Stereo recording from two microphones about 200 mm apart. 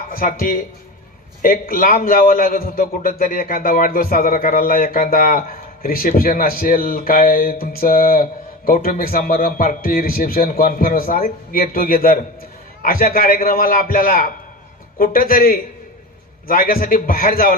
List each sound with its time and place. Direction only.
0.1 s a man's voice: 45° left (ahead or behind)